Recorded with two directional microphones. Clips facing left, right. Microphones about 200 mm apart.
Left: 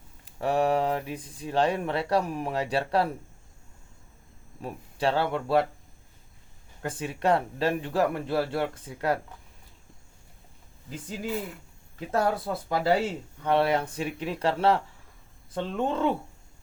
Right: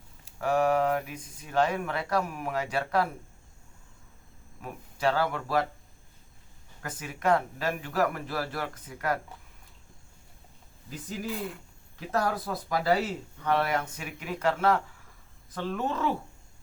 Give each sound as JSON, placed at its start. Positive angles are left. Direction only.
{"t": 0.3, "sound": "speech", "side_deg": 30}
{"t": 4.6, "sound": "speech", "side_deg": 30}
{"t": 6.8, "sound": "speech", "side_deg": 30}
{"t": 12.1, "sound": "speech", "side_deg": 25}